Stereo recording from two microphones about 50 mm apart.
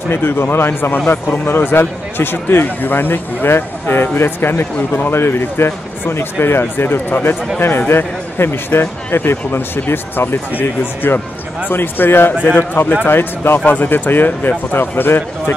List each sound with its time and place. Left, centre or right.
0.1 s speech: left
4.7 s speech: left
5.1 s speech: left